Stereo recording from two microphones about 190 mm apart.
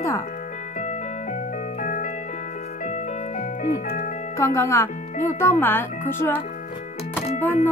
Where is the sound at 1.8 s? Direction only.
40° left (ahead or behind).